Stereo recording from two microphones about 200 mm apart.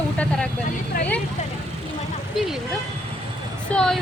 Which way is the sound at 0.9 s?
45° left (ahead or behind).